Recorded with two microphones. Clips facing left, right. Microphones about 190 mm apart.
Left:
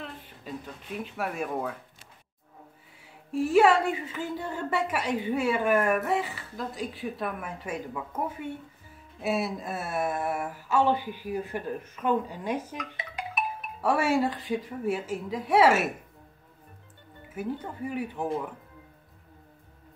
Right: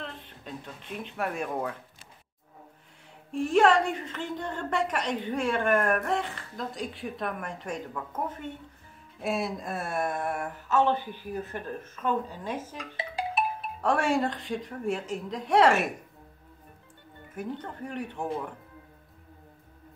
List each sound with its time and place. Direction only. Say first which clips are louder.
0.0 s speech: even; 5° left (ahead or behind)
3.3 s a woman's voice: left 1 dB; 5° left (ahead or behind)
12.7 s music: right 2 dB; 30° right (ahead or behind)
13.7 s a woman's voice: left 1 dB; 5° left (ahead or behind)
17.3 s a woman's voice: left 2 dB; 5° left (ahead or behind)